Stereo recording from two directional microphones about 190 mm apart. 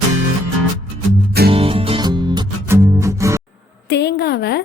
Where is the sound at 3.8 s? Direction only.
60° left (ahead or behind).